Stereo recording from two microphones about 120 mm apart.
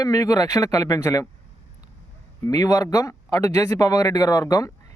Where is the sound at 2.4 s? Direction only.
30° left (ahead or behind).